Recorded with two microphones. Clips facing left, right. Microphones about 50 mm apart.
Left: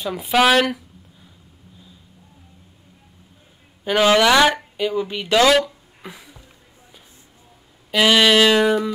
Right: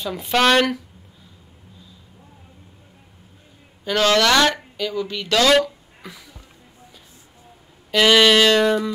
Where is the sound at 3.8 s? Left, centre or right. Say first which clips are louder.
Left 2 dB; centre.